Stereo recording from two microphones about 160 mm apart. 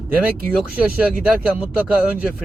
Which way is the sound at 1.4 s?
5° right (ahead or behind).